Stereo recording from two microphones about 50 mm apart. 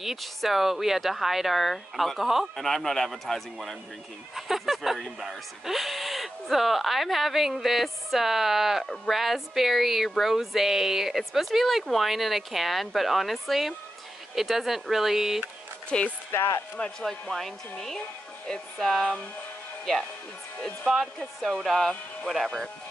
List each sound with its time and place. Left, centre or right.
0.0 s speech: centre
15.9 s speech: centre
17.0 s speech: centre
21.6 s speech: centre